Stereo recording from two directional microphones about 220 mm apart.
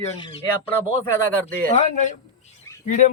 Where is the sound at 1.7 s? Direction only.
30° left (ahead or behind).